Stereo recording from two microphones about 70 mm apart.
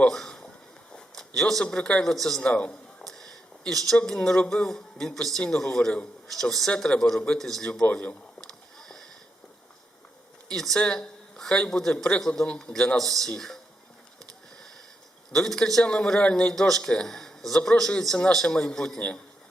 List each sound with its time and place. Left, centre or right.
0.1 s a man's voice: centre
2.0 s speech: centre
2.4 s speech: centre
3.1 s a sound: centre
3.9 s a man's voice: centre
7.7 s speech: centre
8.4 s rowboat: centre
10.5 s a man's voice: centre
15.3 s a man's voice: centre